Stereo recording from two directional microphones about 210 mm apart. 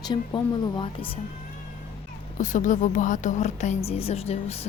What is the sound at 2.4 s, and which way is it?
A woman's voice, 35° left (ahead or behind).